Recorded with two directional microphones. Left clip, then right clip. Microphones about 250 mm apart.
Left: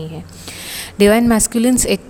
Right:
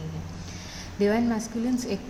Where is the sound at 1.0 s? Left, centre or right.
Left.